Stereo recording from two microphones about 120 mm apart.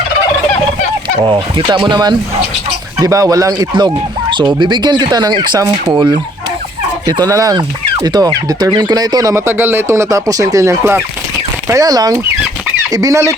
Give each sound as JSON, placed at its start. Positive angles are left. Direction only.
{"t": 1.2, "sound": "speech", "side_deg": -40}